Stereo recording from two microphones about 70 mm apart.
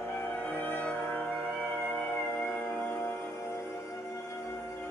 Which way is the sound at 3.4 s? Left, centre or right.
Left.